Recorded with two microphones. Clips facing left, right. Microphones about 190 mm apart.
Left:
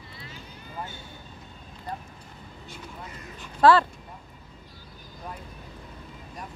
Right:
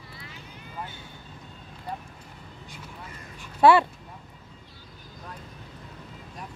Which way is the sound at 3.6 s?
20° right (ahead or behind).